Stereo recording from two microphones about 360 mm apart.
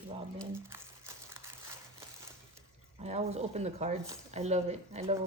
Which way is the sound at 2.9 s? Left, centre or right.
Centre.